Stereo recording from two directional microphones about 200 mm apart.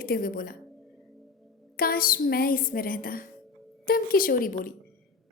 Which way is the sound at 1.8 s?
45° left (ahead or behind).